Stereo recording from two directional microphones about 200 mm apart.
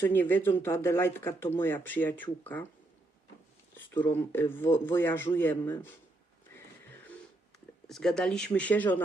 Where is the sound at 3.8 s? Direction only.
10° left (ahead or behind).